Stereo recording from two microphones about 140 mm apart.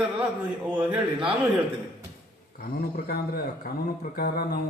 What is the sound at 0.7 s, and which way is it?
Speech, 10° right (ahead or behind).